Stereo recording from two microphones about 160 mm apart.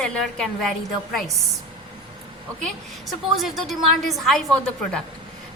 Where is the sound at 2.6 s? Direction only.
Centre (ahead or behind).